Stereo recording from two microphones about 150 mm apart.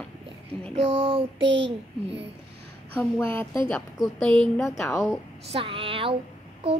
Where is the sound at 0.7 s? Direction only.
40° right (ahead or behind).